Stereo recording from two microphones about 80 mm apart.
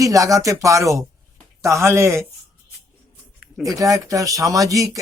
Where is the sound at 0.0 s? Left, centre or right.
Right.